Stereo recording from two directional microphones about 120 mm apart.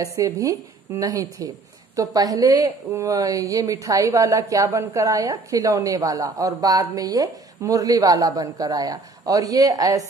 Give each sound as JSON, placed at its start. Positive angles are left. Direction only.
{"t": 0.0, "sound": "a woman's voice", "side_deg": -25}